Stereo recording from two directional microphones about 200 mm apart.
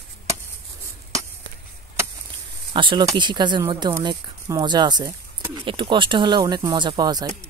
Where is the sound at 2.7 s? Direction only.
25° right (ahead or behind).